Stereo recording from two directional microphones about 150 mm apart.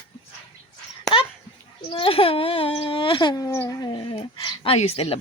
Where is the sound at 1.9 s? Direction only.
35° left (ahead or behind).